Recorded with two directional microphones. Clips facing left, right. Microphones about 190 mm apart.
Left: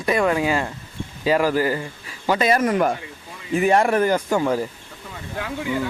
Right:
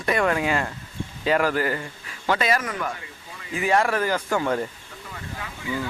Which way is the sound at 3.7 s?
20° left (ahead or behind).